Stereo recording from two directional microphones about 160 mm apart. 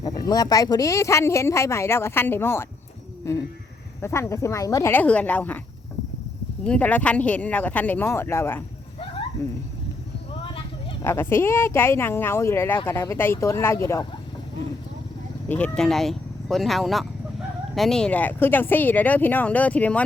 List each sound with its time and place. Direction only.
0.0 s speech: 25° left (ahead or behind)
6.7 s speech: 10° left (ahead or behind)
11.0 s speech: 15° left (ahead or behind)
15.4 s speech: 10° left (ahead or behind)